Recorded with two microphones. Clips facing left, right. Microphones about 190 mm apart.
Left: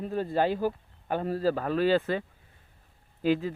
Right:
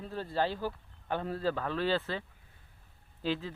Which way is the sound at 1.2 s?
40° left (ahead or behind).